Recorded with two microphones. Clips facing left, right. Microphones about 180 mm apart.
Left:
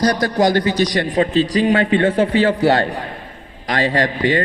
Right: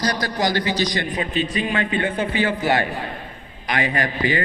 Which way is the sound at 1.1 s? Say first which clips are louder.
Left 8 dB; 35° left (ahead or behind).